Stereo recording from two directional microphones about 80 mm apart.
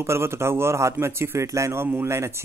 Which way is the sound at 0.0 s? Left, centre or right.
Right.